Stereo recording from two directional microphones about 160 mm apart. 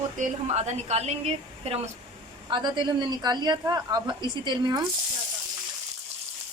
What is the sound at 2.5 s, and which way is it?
A woman's voice, 30° right (ahead or behind).